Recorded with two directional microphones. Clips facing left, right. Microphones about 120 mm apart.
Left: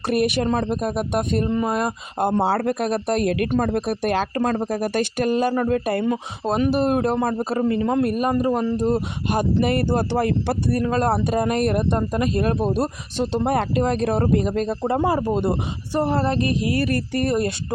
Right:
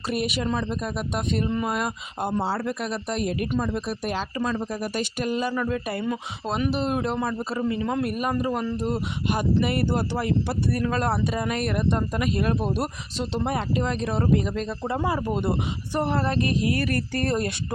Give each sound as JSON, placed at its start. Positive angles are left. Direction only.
{"t": 0.1, "sound": "speech", "side_deg": 50}
{"t": 1.5, "sound": "speech", "side_deg": 35}
{"t": 2.4, "sound": "speech", "side_deg": 60}
{"t": 3.6, "sound": "speech", "side_deg": 60}
{"t": 6.1, "sound": "speech", "side_deg": 35}
{"t": 13.3, "sound": "speech", "side_deg": 45}